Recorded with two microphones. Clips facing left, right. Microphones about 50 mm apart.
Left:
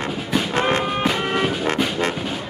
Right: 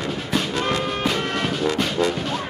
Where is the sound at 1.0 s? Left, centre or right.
Centre.